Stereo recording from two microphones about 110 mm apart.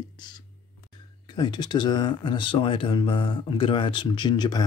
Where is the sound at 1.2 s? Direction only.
40° left (ahead or behind).